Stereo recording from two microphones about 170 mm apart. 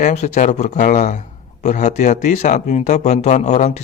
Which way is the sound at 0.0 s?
45° left (ahead or behind).